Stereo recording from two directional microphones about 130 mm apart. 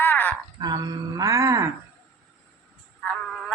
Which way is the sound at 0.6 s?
30° right (ahead or behind).